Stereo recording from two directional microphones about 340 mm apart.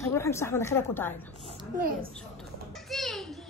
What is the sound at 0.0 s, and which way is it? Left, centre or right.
A woman's voice, centre.